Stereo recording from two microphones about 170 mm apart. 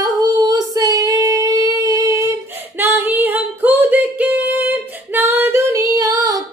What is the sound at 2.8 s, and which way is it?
Female singing, 10° right (ahead or behind).